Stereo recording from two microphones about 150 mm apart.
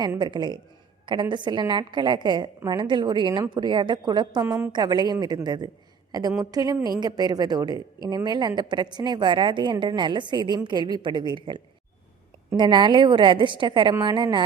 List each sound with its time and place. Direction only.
0.2 s a woman's voice: 30° right (ahead or behind)